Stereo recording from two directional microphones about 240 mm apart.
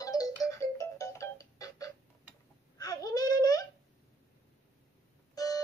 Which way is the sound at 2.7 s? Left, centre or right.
Centre.